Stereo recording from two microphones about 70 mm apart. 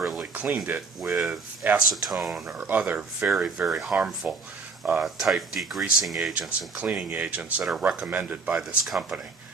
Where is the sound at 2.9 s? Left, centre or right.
Centre.